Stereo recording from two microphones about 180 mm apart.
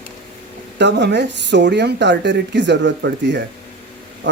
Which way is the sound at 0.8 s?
75° right (ahead or behind).